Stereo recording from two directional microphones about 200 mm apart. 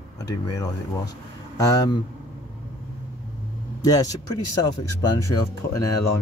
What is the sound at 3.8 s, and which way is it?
Speech, 20° left (ahead or behind).